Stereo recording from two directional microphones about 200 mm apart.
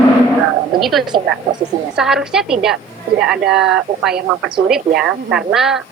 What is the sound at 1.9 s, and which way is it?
Speech, 5° right (ahead or behind).